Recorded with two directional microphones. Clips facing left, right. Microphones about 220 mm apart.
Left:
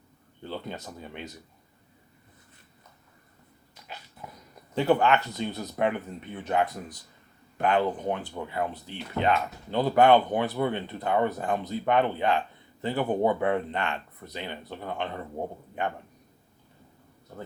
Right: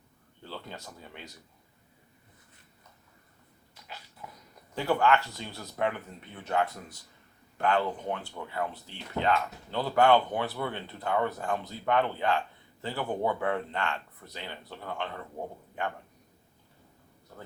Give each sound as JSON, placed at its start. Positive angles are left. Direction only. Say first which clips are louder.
{"t": 0.4, "sound": "speech", "louder": "left 6 dB", "side_deg": 20}
{"t": 4.7, "sound": "speech", "louder": "left 3 dB", "side_deg": 20}